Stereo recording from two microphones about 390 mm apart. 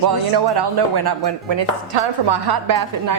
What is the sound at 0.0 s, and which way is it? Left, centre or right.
Speech, right.